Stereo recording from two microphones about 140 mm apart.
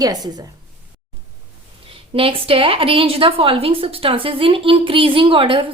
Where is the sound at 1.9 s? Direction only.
40° right (ahead or behind).